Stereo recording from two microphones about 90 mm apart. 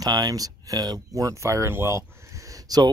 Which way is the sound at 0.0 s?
45° right (ahead or behind).